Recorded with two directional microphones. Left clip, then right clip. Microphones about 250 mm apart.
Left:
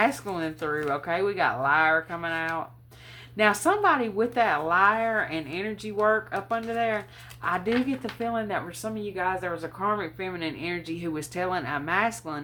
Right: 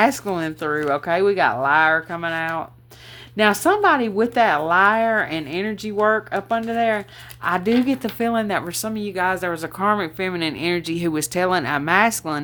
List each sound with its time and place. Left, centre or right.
0.0 s speech: right